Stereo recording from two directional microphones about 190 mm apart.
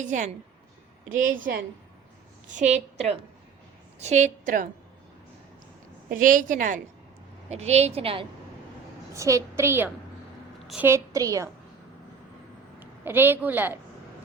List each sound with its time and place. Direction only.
0.0 s a woman's voice: 40° right (ahead or behind)
2.6 s a woman's voice: 35° right (ahead or behind)
6.1 s a woman's voice: 45° right (ahead or behind); by 8.3 s 30° right (ahead or behind)
9.1 s a woman's voice: 15° right (ahead or behind)
12.8 s a woman's voice: 10° right (ahead or behind)